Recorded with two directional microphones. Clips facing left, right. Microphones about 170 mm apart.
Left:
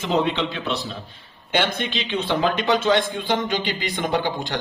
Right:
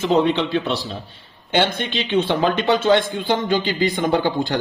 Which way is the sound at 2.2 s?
35° right (ahead or behind).